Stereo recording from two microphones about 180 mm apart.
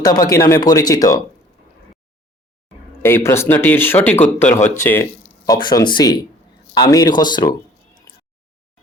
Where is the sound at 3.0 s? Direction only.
15° left (ahead or behind).